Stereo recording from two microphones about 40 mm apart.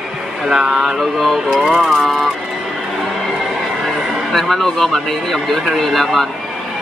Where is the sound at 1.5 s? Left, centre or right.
Centre.